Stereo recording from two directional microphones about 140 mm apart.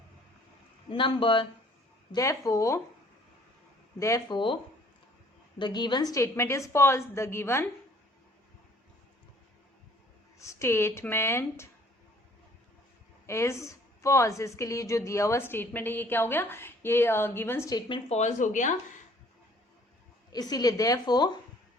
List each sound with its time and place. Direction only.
0.9 s speech: 40° left (ahead or behind)
2.1 s a woman's voice: 25° left (ahead or behind)
4.0 s a woman's voice: 20° left (ahead or behind)
5.5 s a woman's voice: 30° left (ahead or behind)
10.3 s speech: 20° left (ahead or behind)
13.2 s a woman's voice: 20° left (ahead or behind)
18.1 s speech: 55° left (ahead or behind)
20.3 s a woman's voice: 25° left (ahead or behind)